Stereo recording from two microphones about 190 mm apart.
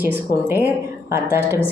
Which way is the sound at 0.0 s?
10° right (ahead or behind).